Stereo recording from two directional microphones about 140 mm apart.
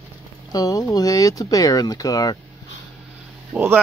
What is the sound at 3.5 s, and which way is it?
Speech, 15° right (ahead or behind).